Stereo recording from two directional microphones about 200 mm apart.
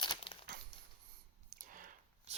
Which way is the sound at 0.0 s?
25° left (ahead or behind).